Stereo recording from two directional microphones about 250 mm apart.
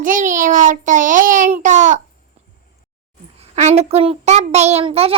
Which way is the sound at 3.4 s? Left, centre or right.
Right.